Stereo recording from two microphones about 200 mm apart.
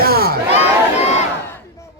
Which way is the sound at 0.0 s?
50° right (ahead or behind).